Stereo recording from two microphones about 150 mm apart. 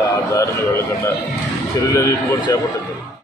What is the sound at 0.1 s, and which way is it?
A man's voice, 20° left (ahead or behind).